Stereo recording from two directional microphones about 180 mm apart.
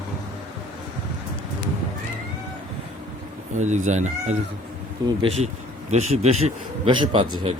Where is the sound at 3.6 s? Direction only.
40° right (ahead or behind).